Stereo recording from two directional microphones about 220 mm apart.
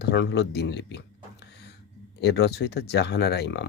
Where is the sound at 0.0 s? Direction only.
50° left (ahead or behind).